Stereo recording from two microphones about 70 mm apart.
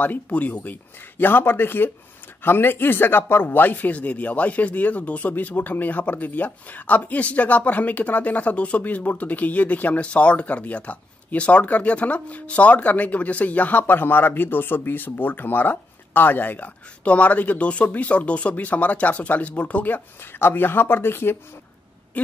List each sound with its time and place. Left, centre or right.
0.0 s speech: left
22.2 s speech: left